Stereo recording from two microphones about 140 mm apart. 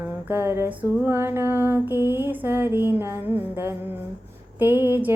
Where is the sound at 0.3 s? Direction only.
20° right (ahead or behind).